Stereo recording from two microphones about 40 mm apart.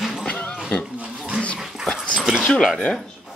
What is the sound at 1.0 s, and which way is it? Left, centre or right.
Dog, right.